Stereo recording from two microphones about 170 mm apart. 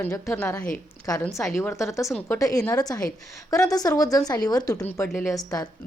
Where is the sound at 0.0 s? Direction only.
15° left (ahead or behind).